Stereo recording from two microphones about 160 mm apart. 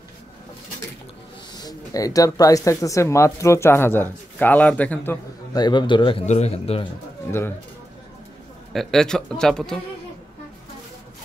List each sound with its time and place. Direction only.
1.6 s speech: 20° left (ahead or behind)
5.6 s a man's voice: 30° left (ahead or behind)
6.2 s speech: 45° left (ahead or behind)
7.2 s speech: 15° left (ahead or behind)
8.7 s speech: 5° left (ahead or behind)